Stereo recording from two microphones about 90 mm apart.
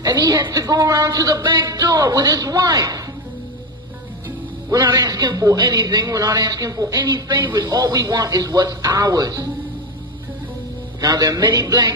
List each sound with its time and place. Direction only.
0.0 s a man's voice: 50° right (ahead or behind)
4.6 s a man's voice: 40° right (ahead or behind)
11.0 s a man's voice: 45° right (ahead or behind)